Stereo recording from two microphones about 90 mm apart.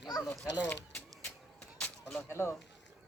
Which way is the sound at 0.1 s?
40° left (ahead or behind).